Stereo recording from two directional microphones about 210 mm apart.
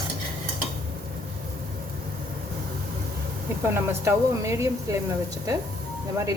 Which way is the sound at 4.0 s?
15° right (ahead or behind).